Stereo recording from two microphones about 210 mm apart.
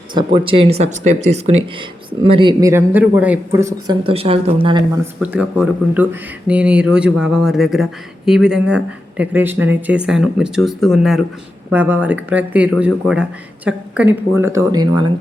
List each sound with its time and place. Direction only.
0.3 s speech: 25° right (ahead or behind)
4.0 s speech: 25° right (ahead or behind)
5.2 s speech: 5° right (ahead or behind)